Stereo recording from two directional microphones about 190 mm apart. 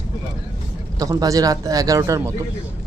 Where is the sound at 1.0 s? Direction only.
15° right (ahead or behind).